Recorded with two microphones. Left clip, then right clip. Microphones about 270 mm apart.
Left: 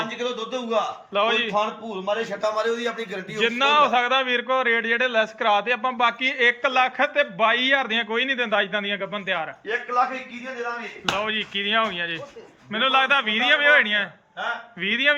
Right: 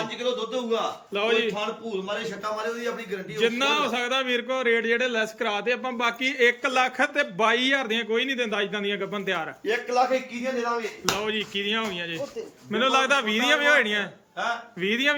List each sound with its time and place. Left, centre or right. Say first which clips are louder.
0.2 s a man's voice: even; centre
1.1 s a man's voice: left 2 dB; centre
2.0 s a man's voice: left 9 dB; left
3.3 s a man's voice: left 4 dB; centre
11.0 s a man's voice: left 6 dB; centre